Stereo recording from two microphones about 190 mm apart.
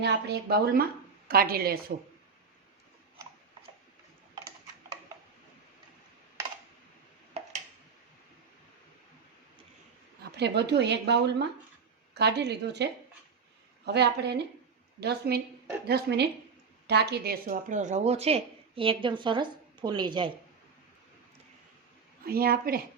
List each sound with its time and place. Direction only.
0.0 s a woman's voice: 60° right (ahead or behind)
10.3 s speech: 60° right (ahead or behind); by 20.3 s 25° right (ahead or behind)
22.3 s a woman's voice: 50° right (ahead or behind)